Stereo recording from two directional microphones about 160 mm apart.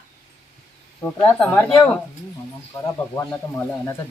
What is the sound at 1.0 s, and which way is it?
Speech, 10° left (ahead or behind).